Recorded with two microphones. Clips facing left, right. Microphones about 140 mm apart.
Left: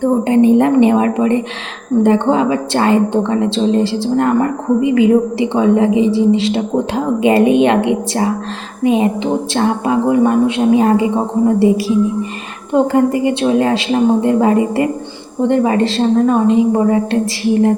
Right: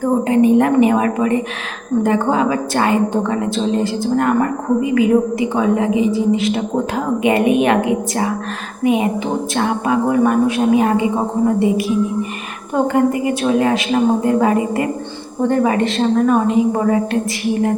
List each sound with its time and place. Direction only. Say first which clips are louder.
0.0 s a woman's voice: left 2 dB; 30° left (ahead or behind)